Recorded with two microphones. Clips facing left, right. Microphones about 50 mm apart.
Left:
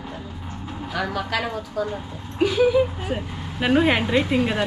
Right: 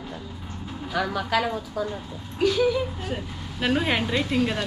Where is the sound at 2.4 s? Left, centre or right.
Centre.